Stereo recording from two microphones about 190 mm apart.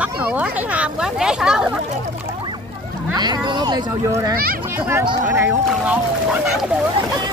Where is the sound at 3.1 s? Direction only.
20° right (ahead or behind).